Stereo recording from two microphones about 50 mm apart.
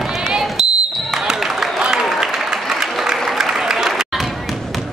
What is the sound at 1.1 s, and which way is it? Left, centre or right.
Applause, centre.